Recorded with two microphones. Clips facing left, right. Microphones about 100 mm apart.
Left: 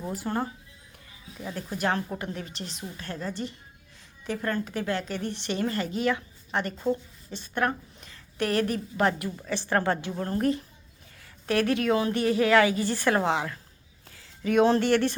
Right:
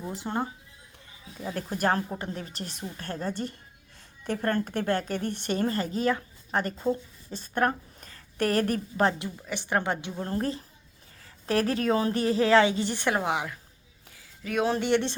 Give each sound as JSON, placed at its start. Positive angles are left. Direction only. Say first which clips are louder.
{"t": 0.1, "sound": "a woman's voice", "louder": "left 1 dB", "side_deg": -20}
{"t": 1.8, "sound": "a woman's voice", "louder": "right 1 dB", "side_deg": -40}
{"t": 4.4, "sound": "a woman's voice", "louder": "right 2 dB", "side_deg": -35}
{"t": 4.7, "sound": "a woman's voice", "louder": "right 2 dB", "side_deg": -50}
{"t": 9.0, "sound": "a woman's voice", "louder": "left 1 dB", "side_deg": -25}
{"t": 14.4, "sound": "speech", "louder": "left 6 dB", "side_deg": -5}
{"t": 14.8, "sound": "a woman's voice", "louder": "left 2 dB", "side_deg": -20}